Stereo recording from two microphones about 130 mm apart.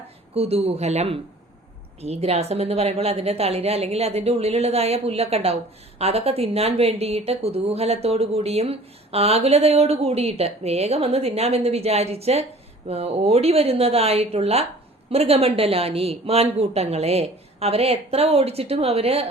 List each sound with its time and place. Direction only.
0.3 s a woman's voice: 50° right (ahead or behind)